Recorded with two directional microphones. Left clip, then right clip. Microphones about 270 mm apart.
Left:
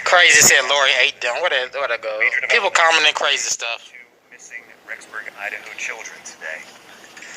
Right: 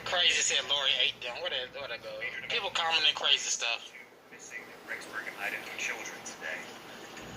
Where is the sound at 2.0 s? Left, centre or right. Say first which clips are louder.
Left 19 dB; left.